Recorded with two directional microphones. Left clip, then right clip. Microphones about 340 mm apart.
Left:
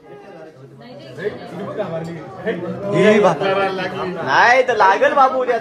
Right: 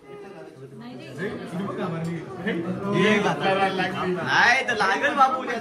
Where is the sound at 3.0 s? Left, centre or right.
Centre.